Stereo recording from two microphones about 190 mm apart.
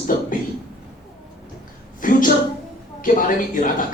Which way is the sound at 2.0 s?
45° left (ahead or behind).